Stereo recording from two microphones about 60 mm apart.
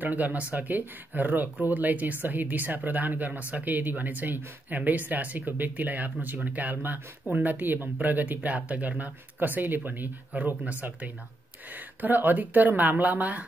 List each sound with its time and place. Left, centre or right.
0.0 s speech: right